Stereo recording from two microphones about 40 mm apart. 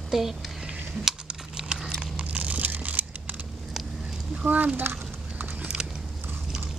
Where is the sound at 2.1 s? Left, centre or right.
Right.